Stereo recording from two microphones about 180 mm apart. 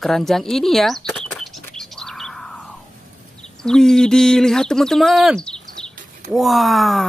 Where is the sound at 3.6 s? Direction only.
5° left (ahead or behind).